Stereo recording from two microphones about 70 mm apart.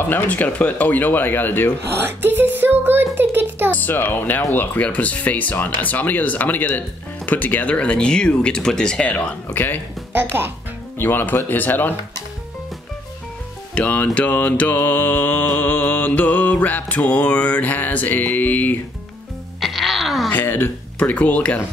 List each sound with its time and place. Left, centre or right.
0.1 s mantra: left
2.0 s speech: right
3.7 s mantra: left
7.2 s speech: left
9.5 s mantra: left
10.3 s speech: right
11.0 s mantra: left
13.7 s mantra: left
19.6 s music: centre
20.2 s speech: left
21.0 s mantra: left